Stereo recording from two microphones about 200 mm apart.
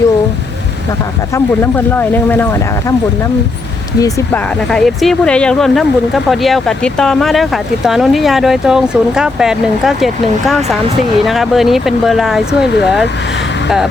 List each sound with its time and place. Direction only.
1.6 s speech: 10° left (ahead or behind)
4.0 s speech: 5° left (ahead or behind)